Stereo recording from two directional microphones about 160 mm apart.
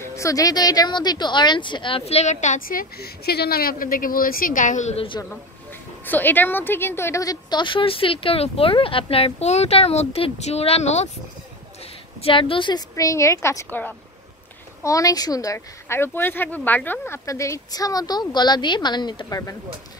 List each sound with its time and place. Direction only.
0.0 s a woman's voice: 20° left (ahead or behind); by 5.0 s 50° left (ahead or behind)
6.0 s a woman's voice: 10° left (ahead or behind); by 11.1 s 45° left (ahead or behind)
12.2 s speech: 35° left (ahead or behind)